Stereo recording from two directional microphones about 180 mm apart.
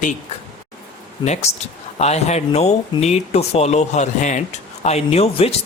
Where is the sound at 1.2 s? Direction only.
40° left (ahead or behind).